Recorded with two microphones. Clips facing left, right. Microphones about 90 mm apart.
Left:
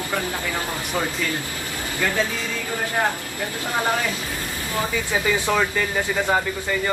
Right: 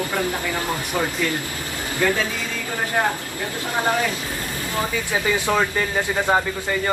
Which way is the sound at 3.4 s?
20° right (ahead or behind).